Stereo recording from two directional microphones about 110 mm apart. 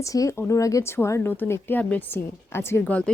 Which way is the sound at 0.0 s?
30° left (ahead or behind).